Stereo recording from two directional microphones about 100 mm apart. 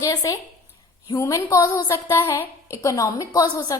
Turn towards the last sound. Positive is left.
turn(degrees=40)  # may be behind; listen again after turning